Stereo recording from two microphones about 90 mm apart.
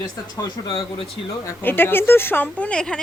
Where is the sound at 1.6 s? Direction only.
25° left (ahead or behind).